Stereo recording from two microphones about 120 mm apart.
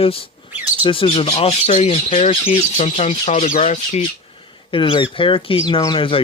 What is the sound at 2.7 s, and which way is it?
Speech, 80° left.